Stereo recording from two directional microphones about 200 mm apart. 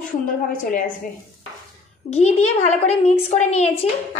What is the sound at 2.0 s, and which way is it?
A woman's voice, 30° left (ahead or behind).